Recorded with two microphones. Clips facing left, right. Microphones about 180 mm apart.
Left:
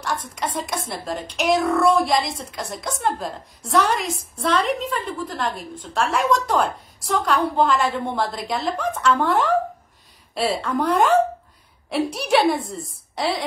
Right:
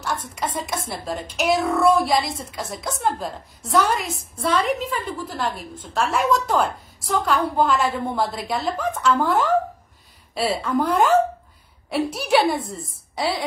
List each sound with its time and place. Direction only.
0.0 s speech: centre (ahead or behind)